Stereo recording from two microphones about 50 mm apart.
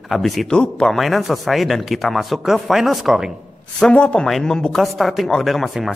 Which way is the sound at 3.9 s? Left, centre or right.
Left.